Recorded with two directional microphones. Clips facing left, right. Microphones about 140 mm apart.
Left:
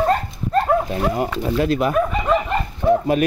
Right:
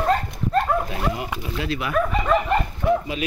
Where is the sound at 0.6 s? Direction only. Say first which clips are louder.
Left 6 dB; 40° left (ahead or behind).